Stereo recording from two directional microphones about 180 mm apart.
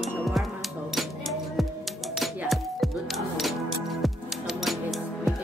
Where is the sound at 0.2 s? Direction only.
Centre (ahead or behind).